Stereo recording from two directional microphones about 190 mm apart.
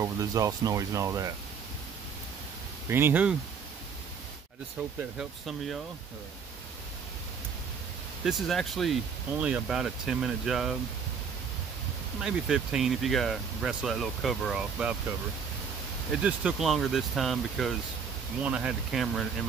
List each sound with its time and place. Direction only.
0.0 s speech: 15° right (ahead or behind)
2.9 s speech: 10° right (ahead or behind)
8.2 s speech: centre (ahead or behind)
12.2 s speech: 5° right (ahead or behind)
16.1 s speech: 5° right (ahead or behind)